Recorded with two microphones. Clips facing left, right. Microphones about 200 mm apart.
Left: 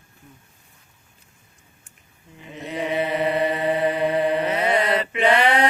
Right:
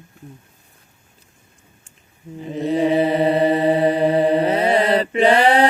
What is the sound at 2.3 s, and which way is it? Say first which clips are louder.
Mantra: right 10 dB; 35° right (ahead or behind).